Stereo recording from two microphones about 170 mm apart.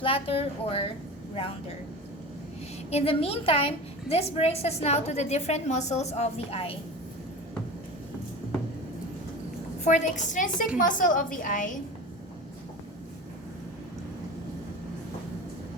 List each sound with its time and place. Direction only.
0.0 s a woman's voice: 35° left (ahead or behind)
2.9 s a woman's voice: 35° left (ahead or behind)
9.8 s a woman's voice: 45° left (ahead or behind)